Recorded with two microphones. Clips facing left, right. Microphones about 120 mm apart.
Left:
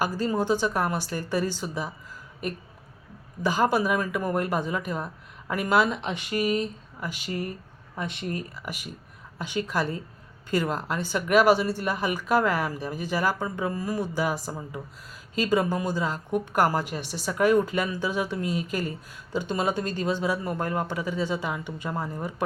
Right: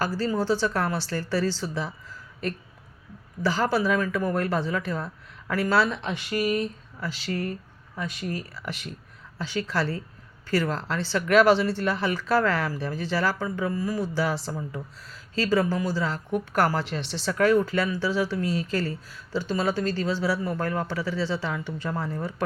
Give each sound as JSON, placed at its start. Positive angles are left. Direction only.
{"t": 0.0, "sound": "a woman's voice", "side_deg": 15}
{"t": 8.5, "sound": "a woman's voice", "side_deg": 10}
{"t": 14.2, "sound": "a woman's voice", "side_deg": 15}